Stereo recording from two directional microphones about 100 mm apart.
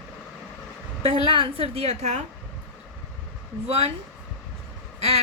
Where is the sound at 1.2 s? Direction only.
65° right (ahead or behind).